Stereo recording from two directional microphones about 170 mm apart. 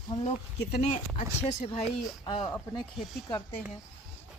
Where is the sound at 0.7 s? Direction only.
40° left (ahead or behind).